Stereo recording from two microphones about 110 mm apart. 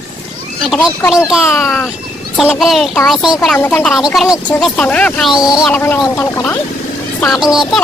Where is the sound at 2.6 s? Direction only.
Centre (ahead or behind).